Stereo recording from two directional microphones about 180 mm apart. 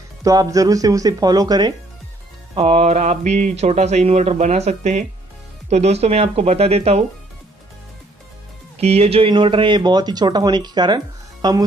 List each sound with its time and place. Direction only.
0.2 s speech: 20° right (ahead or behind)
2.5 s speech: 35° right (ahead or behind)
8.7 s speech: 35° right (ahead or behind)